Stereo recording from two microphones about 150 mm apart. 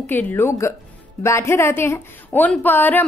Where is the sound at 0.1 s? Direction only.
15° left (ahead or behind).